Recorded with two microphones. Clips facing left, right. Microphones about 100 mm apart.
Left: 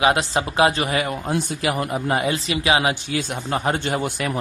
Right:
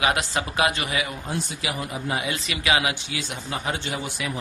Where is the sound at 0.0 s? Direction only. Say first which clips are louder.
Left 5 dB; 30° left (ahead or behind).